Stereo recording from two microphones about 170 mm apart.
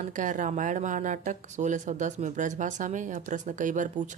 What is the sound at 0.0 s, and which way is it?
Speech, 50° right (ahead or behind).